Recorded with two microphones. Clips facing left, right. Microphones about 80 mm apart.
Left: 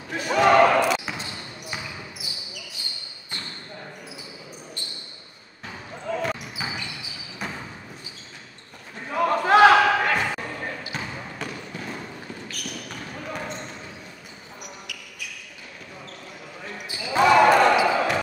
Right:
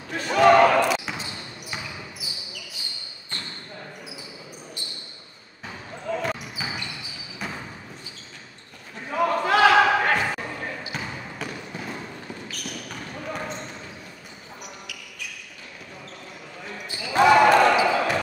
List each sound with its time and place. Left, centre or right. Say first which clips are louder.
0.1 s basketball bounce: right 2 dB; centre
6.0 s basketball bounce: even; centre
9.1 s a sound: even; centre
9.4 s basketball bounce: left 4 dB; left
10.1 s basketball bounce: even; centre
16.7 s basketball bounce: left 1 dB; centre
17.2 s basketball bounce: even; centre